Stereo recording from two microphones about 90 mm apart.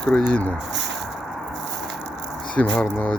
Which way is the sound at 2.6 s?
15° left (ahead or behind).